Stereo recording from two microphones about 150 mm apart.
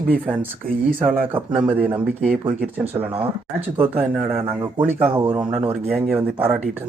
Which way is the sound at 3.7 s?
10° right (ahead or behind).